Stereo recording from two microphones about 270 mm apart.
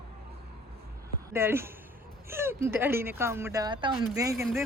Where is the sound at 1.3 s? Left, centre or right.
Centre.